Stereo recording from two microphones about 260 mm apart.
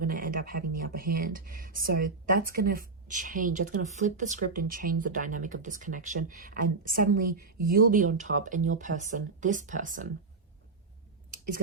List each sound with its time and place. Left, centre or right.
0.0 s speech: right
11.3 s clicking: right